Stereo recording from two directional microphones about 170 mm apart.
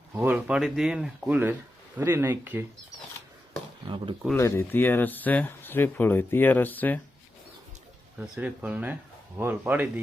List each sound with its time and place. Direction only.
0.1 s speech: 10° right (ahead or behind)
3.8 s speech: 30° right (ahead or behind)
4.4 s speech: 15° left (ahead or behind)
8.4 s speech: 10° right (ahead or behind)